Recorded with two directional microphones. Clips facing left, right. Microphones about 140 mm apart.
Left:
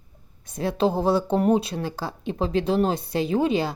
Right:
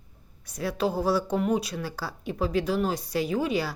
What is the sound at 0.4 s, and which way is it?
A woman's voice, 25° left (ahead or behind).